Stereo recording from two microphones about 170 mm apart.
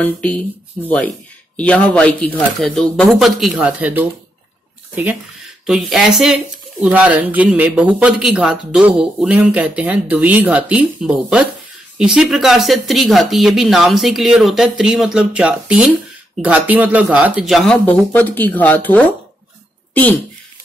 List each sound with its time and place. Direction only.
0.0 s speech: 5° left (ahead or behind)
5.7 s speech: centre (ahead or behind)